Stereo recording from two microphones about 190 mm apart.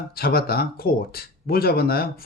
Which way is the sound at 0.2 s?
55° left (ahead or behind).